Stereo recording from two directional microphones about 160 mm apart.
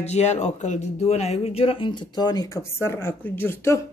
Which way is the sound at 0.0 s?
45° left (ahead or behind).